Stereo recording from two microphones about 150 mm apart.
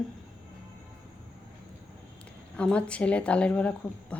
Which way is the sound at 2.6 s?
5° left (ahead or behind).